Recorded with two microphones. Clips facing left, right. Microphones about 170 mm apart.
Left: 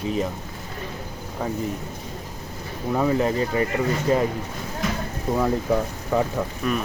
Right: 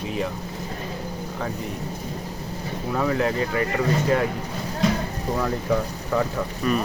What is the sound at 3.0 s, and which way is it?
Speech, 15° left (ahead or behind).